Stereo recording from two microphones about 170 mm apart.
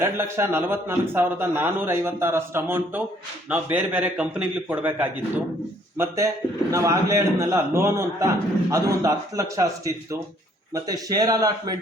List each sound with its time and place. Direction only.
0.0 s a man's voice: 15° right (ahead or behind)